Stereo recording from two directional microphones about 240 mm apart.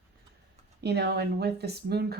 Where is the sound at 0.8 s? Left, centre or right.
Right.